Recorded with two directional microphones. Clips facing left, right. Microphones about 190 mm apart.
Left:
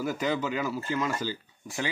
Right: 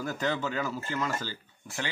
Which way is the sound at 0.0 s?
10° left (ahead or behind).